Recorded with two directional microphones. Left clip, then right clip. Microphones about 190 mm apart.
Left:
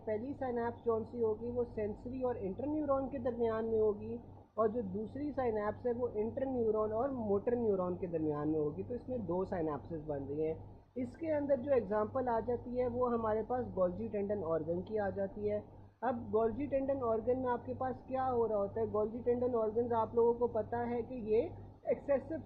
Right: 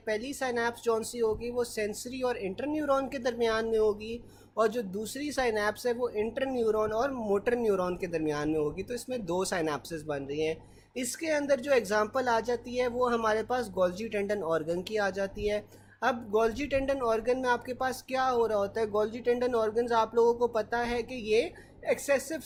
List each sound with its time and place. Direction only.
0.0 s speech: 25° right (ahead or behind)
1.7 s speech: 25° right (ahead or behind)
5.1 s speech: 25° right (ahead or behind)
6.7 s speech: 40° right (ahead or behind)
20.1 s speech: 50° right (ahead or behind)
20.6 s speech: 25° right (ahead or behind)